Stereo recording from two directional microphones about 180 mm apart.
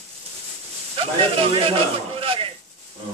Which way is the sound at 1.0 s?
30° right (ahead or behind).